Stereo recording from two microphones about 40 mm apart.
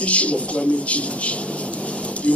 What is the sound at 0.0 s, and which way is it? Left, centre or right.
Speech, left.